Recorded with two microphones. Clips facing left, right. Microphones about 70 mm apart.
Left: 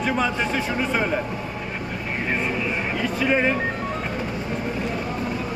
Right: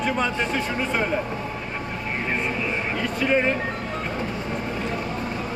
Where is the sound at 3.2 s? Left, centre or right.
Centre.